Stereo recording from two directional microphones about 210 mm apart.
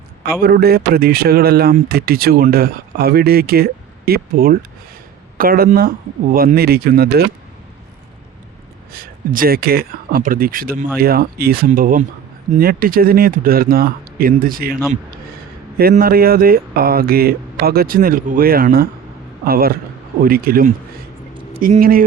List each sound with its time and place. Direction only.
0.2 s speech: 45° right (ahead or behind)
8.9 s speech: 45° right (ahead or behind)
15.8 s speech: 45° right (ahead or behind)